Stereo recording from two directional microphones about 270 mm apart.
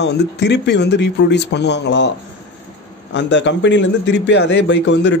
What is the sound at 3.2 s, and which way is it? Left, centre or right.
A man's voice, left.